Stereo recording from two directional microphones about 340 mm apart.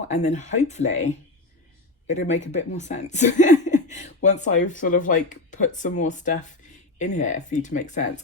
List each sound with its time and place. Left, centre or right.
0.1 s speech: centre